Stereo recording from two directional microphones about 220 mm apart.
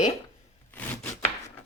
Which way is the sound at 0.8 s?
10° left (ahead or behind).